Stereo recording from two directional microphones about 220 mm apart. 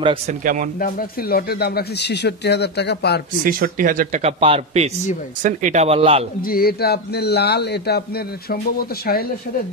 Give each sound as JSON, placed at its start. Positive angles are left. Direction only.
{"t": 0.0, "sound": "speech", "side_deg": -25}
{"t": 0.7, "sound": "speech", "side_deg": 40}
{"t": 3.4, "sound": "a man's voice", "side_deg": -40}
{"t": 6.4, "sound": "speech", "side_deg": 45}